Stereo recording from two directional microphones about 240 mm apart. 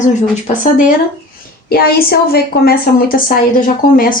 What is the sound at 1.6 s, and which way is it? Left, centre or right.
A woman's voice, left.